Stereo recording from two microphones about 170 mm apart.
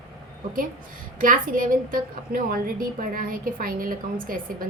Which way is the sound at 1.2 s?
55° right (ahead or behind).